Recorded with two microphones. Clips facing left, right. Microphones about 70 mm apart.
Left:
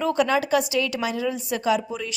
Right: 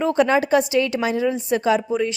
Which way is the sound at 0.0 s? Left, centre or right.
Right.